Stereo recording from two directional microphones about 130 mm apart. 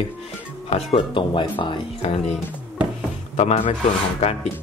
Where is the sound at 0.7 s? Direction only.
50° left (ahead or behind).